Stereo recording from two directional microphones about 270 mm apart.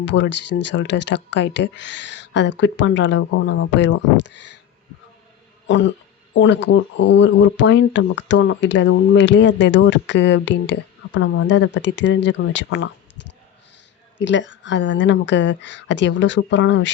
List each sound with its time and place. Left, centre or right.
0.0 s speech: left
5.6 s speech: left
14.2 s speech: left